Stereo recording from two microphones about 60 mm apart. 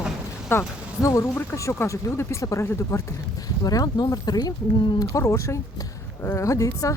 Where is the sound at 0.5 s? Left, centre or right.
Left.